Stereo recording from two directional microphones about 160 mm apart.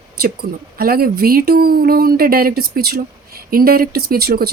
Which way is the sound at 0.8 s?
70° right (ahead or behind).